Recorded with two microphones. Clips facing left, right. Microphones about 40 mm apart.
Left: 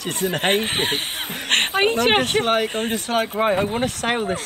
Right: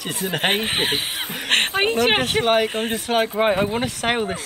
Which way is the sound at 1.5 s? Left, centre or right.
Centre.